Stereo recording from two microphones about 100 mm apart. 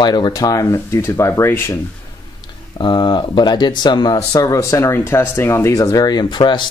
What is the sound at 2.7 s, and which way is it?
Speech, 50° left (ahead or behind).